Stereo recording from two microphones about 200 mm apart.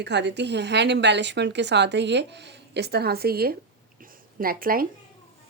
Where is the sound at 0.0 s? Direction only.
60° right (ahead or behind).